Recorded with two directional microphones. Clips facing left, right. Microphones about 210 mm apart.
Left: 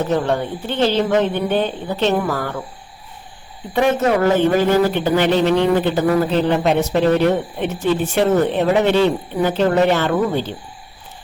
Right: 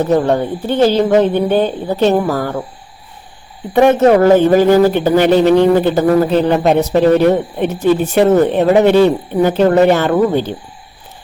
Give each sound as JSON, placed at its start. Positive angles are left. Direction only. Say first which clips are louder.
{"t": 0.1, "sound": "speech", "louder": "right 6 dB", "side_deg": -40}
{"t": 3.8, "sound": "a man's voice", "louder": "right 7 dB", "side_deg": -45}